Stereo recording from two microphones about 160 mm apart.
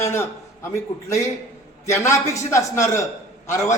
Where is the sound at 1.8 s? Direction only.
20° left (ahead or behind).